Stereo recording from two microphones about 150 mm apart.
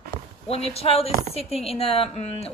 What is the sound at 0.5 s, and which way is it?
A woman's voice, 40° left (ahead or behind).